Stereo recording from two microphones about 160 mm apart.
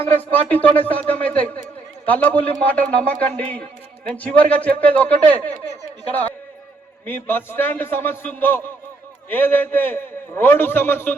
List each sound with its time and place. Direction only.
0.3 s a man's voice: 10° left (ahead or behind)
7.0 s a man's voice: 15° left (ahead or behind)